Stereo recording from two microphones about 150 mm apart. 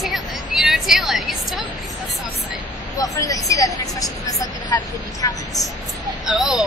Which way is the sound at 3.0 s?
25° left (ahead or behind).